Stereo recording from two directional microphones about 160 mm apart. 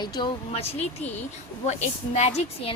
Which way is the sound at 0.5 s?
40° left (ahead or behind).